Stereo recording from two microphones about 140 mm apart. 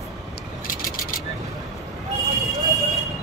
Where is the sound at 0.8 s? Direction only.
85° left.